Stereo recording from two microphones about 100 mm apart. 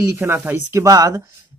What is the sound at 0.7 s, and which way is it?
Speech, 35° right (ahead or behind).